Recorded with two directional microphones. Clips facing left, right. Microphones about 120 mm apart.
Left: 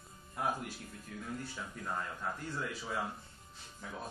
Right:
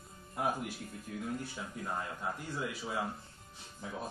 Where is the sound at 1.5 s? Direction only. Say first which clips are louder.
Right 1 dB; 15° right (ahead or behind).